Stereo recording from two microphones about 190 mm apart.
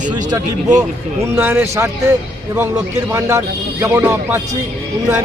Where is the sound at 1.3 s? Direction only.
10° right (ahead or behind).